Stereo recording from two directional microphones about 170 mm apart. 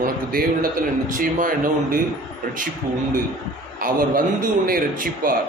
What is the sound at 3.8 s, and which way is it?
Speech, 55° right (ahead or behind).